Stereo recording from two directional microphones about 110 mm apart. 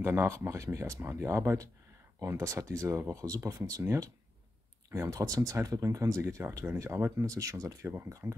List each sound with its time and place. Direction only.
0.0 s speech: 20° right (ahead or behind)